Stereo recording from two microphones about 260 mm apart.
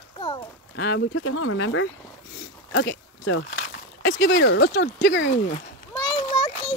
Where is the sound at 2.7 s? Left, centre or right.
Left.